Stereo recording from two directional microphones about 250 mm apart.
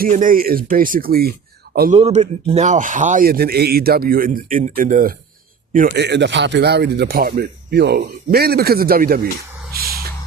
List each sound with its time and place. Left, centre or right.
0.0 s a man's voice: right
2.0 s a man's voice: right
9.7 s a sound: right